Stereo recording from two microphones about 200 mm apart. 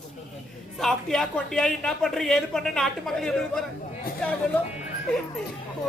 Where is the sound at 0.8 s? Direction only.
Centre (ahead or behind).